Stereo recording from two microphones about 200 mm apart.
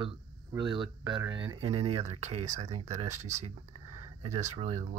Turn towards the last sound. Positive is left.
turn(degrees=-35)  # may be behind; listen again after turning